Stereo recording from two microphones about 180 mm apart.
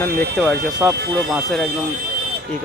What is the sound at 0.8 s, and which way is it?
Speech, 5° right (ahead or behind).